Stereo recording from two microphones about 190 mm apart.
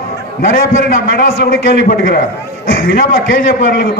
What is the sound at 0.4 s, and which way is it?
A man's voice, 45° left (ahead or behind).